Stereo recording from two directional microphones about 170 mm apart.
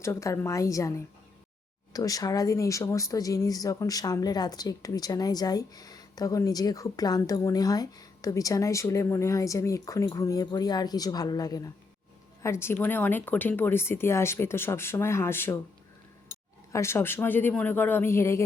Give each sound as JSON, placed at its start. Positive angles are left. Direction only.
{"t": 0.0, "sound": "speech", "side_deg": 15}
{"t": 16.7, "sound": "speech", "side_deg": 15}